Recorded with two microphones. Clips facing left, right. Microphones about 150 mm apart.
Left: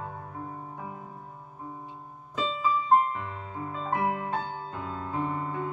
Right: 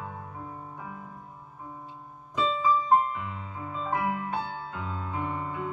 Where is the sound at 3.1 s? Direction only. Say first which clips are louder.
Left 1 dB; 40° left (ahead or behind).